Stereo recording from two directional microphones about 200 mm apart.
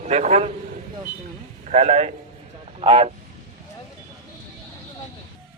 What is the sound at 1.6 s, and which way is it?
A man's voice, 35° right (ahead or behind).